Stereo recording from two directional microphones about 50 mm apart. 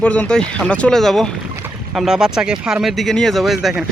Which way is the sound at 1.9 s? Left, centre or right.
Centre.